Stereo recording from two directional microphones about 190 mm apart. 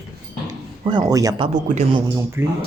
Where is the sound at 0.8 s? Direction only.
20° right (ahead or behind).